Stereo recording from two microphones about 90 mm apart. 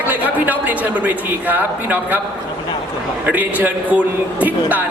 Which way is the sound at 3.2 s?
15° right (ahead or behind).